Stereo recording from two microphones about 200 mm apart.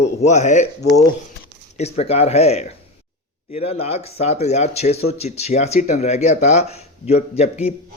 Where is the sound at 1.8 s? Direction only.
35° left (ahead or behind).